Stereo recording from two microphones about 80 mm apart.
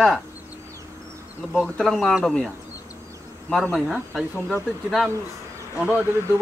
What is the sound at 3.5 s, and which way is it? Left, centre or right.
Speech, centre.